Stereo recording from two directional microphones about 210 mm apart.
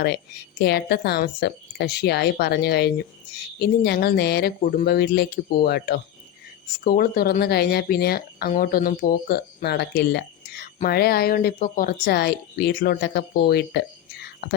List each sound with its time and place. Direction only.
0.6 s speech: 50° left (ahead or behind)